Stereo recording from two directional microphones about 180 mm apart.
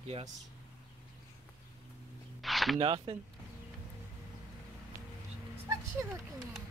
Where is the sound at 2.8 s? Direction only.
30° right (ahead or behind).